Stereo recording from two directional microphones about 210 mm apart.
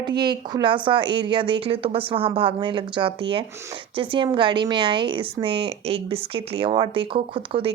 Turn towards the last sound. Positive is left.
turn(degrees=-25)  # may be behind; listen again after turning